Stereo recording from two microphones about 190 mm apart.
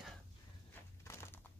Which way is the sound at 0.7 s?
15° left (ahead or behind).